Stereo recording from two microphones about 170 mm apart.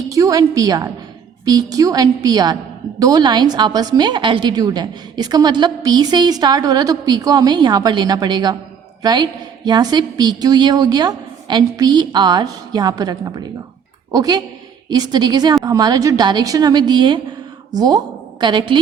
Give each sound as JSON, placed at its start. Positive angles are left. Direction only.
{"t": 0.1, "sound": "a woman's voice", "side_deg": -20}